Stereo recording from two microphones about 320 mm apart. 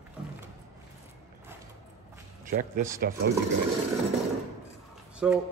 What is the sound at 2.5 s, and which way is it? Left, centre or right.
Speech, right.